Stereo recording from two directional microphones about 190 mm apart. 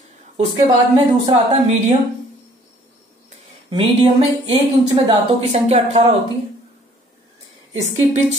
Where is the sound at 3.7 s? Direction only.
30° right (ahead or behind).